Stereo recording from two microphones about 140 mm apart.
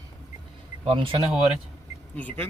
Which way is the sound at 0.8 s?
40° right (ahead or behind).